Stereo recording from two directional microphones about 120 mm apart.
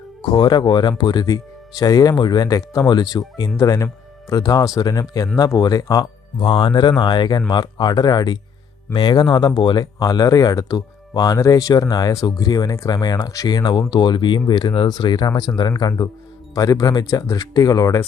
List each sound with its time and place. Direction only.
0.2 s speech: 40° left (ahead or behind)